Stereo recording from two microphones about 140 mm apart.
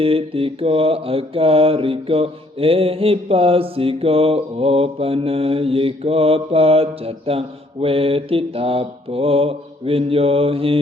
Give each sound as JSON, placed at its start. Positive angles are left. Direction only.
{"t": 0.0, "sound": "mantra", "side_deg": -40}